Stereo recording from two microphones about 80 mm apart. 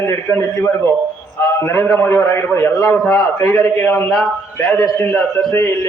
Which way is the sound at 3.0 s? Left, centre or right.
Centre.